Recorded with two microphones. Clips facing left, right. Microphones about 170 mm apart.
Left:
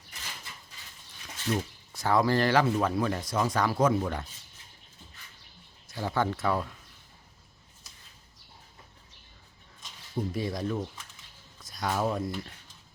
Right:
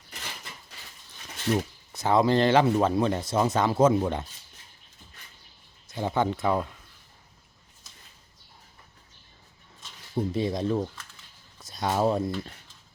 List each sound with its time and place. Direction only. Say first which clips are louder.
1.5 s speech: right 4 dB; 20° right (ahead or behind)
5.9 s speech: right 3 dB; 20° right (ahead or behind)
10.2 s speech: right 4 dB; 25° right (ahead or behind)